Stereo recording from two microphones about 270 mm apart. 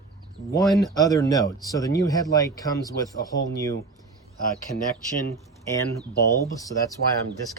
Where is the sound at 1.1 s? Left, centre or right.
Centre.